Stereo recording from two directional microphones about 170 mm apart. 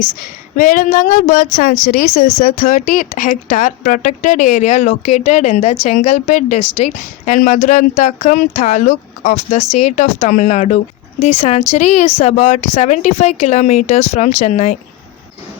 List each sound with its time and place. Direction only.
0.2 s a woman's voice: 50° left (ahead or behind)